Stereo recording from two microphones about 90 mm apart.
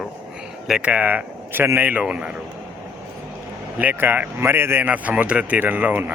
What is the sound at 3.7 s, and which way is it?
Speech, 15° right (ahead or behind).